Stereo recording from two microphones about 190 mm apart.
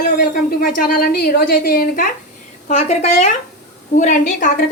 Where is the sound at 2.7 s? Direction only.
35° left (ahead or behind).